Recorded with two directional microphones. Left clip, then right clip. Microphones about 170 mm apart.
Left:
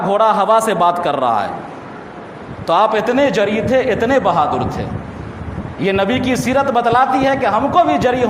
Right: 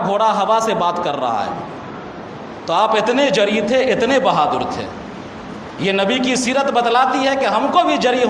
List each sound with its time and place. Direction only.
0.1 s a man's voice: 45° left (ahead or behind)
2.6 s a man's voice: 40° left (ahead or behind)